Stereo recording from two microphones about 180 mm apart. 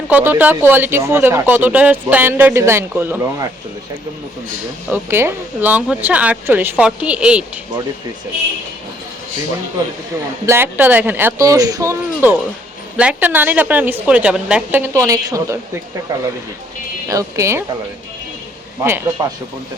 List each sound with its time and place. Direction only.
0.1 s speech: 10° right (ahead or behind)
4.9 s speech: 15° right (ahead or behind)
10.4 s speech: 15° right (ahead or behind)
18.8 s speech: 15° right (ahead or behind)